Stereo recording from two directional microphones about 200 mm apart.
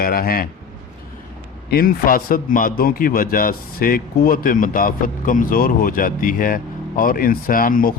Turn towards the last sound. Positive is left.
turn(degrees=45)  # may be behind; listen again after turning